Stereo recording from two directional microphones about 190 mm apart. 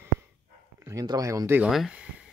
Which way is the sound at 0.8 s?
15° right (ahead or behind).